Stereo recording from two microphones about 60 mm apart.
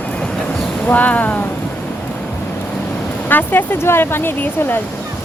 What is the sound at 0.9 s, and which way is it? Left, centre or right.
Speech, left.